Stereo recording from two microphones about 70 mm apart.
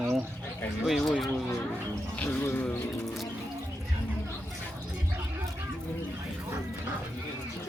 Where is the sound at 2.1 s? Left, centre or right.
Left.